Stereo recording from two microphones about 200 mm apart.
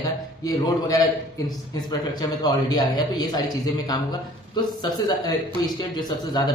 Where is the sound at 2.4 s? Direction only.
20° left (ahead or behind).